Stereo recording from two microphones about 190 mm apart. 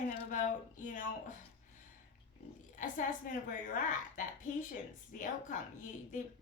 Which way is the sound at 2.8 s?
45° left (ahead or behind).